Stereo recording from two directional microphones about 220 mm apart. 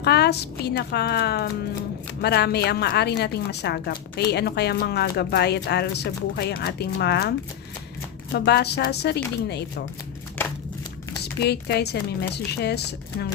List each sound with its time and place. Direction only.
0.0 s a woman's voice: 50° left (ahead or behind)
10.4 s crumpling: 10° left (ahead or behind)
11.4 s a woman's voice: 50° left (ahead or behind)